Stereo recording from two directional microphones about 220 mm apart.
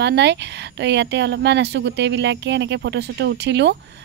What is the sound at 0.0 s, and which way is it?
Speech, 50° right (ahead or behind).